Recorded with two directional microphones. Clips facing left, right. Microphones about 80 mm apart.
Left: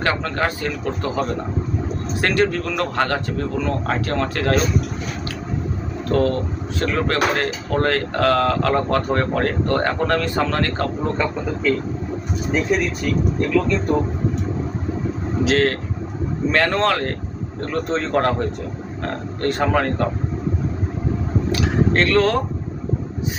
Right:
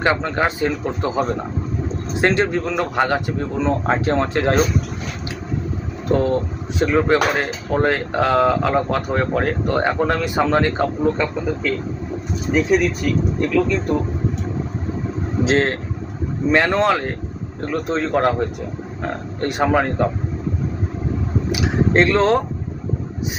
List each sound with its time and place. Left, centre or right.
0.0 s a man's voice: centre
6.1 s speech: centre
11.0 s speech: centre
15.4 s a man's voice: right; by 18.4 s centre
19.0 s speech: centre
21.5 s speech: centre